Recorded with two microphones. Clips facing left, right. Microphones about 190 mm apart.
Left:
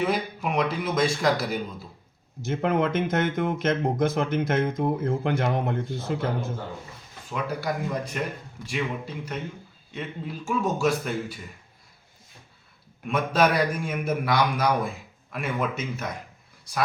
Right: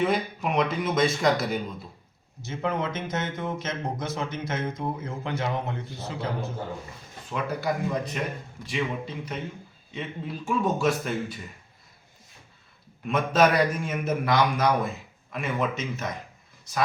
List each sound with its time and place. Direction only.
0.0 s a man's voice: 5° left (ahead or behind)
2.5 s speech: 55° left (ahead or behind)
7.3 s a man's voice: 5° left (ahead or behind)
13.1 s a man's voice: centre (ahead or behind)